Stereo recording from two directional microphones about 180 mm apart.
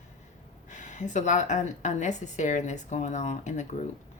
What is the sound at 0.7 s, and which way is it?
A woman's voice, 40° left (ahead or behind).